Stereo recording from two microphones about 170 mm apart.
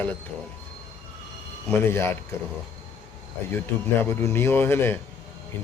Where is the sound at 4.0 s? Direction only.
15° left (ahead or behind).